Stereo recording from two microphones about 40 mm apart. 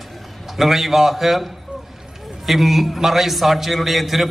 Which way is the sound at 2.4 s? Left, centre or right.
Centre.